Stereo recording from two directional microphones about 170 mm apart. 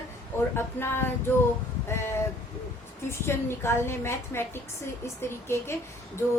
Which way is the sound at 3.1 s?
15° left (ahead or behind).